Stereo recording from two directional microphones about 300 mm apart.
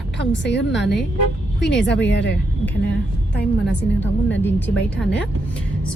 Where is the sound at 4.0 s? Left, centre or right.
Left.